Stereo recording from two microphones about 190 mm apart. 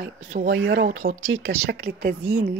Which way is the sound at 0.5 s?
80° right.